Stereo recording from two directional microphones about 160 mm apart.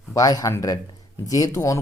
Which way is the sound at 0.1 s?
20° left (ahead or behind).